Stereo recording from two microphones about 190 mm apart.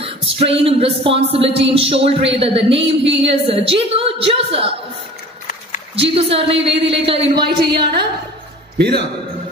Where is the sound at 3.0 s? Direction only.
70° right (ahead or behind).